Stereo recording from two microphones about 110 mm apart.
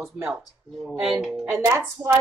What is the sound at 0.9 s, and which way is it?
Speech, 5° right (ahead or behind).